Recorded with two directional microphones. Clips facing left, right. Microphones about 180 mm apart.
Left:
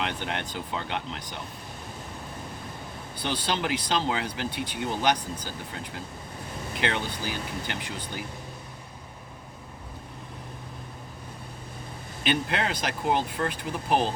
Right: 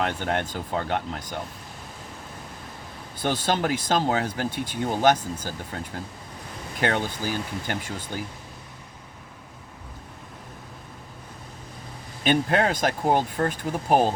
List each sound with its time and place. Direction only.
0.0 s speech: 45° right (ahead or behind)
3.2 s speech: 45° right (ahead or behind)
12.2 s speech: 45° right (ahead or behind)